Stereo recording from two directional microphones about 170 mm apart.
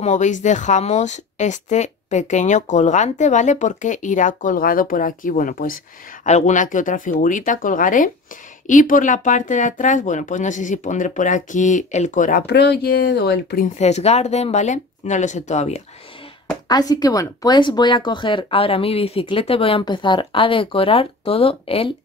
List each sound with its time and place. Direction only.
0.0 s speech: 45° left (ahead or behind); by 13.7 s 75° left (ahead or behind)
13.7 s speech: 40° left (ahead or behind)
16.6 s speech: 25° left (ahead or behind)